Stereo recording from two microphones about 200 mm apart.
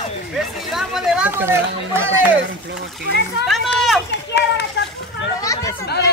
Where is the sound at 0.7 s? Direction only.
Centre (ahead or behind).